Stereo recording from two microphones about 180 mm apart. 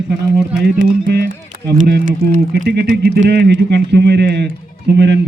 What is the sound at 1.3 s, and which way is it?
Run, 50° right (ahead or behind).